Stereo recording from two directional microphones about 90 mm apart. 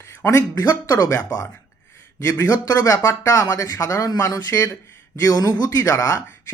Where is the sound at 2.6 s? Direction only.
40° left (ahead or behind).